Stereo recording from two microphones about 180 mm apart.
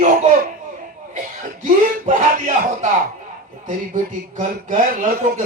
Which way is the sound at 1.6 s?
45° right (ahead or behind).